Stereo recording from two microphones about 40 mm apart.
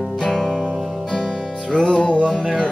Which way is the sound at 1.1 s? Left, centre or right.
Left.